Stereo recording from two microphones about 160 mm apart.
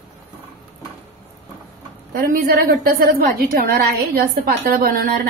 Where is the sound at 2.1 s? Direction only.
65° right (ahead or behind).